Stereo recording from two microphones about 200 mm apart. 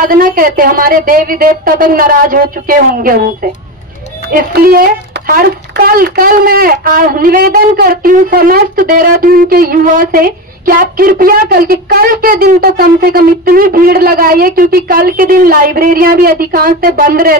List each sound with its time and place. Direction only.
0.0 s a woman's voice: 45° right (ahead or behind)
4.3 s a woman's voice: 45° right (ahead or behind)